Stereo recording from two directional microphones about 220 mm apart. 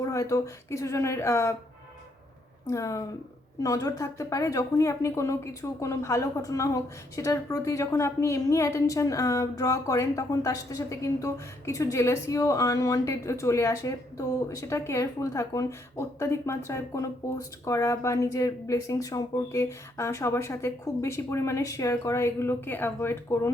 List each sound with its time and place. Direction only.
0.0 s speech: 15° left (ahead or behind)
2.6 s speech: 15° left (ahead or behind)